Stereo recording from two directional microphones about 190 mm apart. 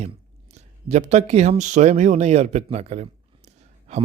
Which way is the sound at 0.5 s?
35° right (ahead or behind).